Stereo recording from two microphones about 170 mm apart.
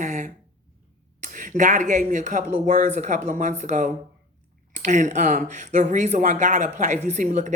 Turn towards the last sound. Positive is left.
turn(degrees=-50)  # may be behind; listen again after turning